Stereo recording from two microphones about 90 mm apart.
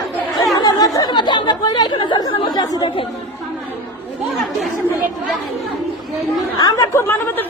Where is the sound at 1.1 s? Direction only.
55° left (ahead or behind).